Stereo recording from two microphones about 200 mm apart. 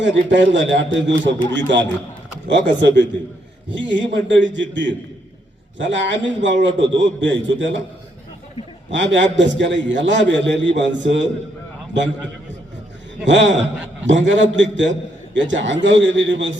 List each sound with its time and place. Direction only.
0.0 s a man's voice: 65° right (ahead or behind)
8.9 s a man's voice: 65° right (ahead or behind)
13.2 s a man's voice: 65° right (ahead or behind)